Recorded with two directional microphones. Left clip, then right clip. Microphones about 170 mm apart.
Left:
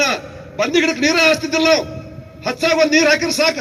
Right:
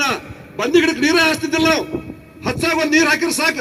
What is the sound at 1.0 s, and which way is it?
A man's voice, 45° left (ahead or behind).